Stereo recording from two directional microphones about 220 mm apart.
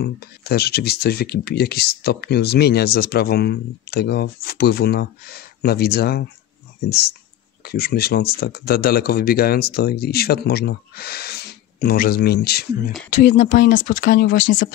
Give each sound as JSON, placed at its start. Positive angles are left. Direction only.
{"t": 0.0, "sound": "speech", "side_deg": 45}
{"t": 13.3, "sound": "speech", "side_deg": 35}